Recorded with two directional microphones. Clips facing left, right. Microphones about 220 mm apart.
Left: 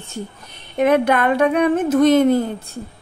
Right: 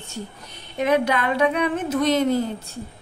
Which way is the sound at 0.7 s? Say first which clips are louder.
Left 5 dB; 55° left (ahead or behind).